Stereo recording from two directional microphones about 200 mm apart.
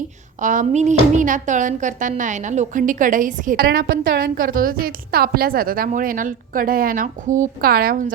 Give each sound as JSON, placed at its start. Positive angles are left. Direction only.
{"t": 0.3, "sound": "speech", "side_deg": -40}